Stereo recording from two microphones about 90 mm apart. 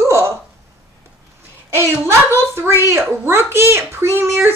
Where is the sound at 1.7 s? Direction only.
30° right (ahead or behind).